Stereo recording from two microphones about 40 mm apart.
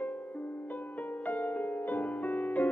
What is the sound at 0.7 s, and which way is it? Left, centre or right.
Music, left.